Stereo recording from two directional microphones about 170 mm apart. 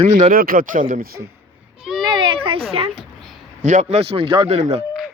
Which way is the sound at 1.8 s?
5° right (ahead or behind).